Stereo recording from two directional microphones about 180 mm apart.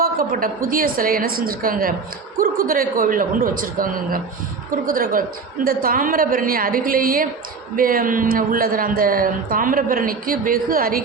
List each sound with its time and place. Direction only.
0.0 s speech: 50° right (ahead or behind)